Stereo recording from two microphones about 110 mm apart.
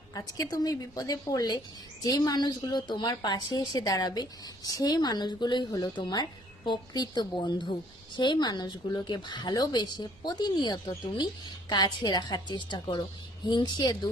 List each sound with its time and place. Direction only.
0.1 s a woman's voice: 35° left (ahead or behind)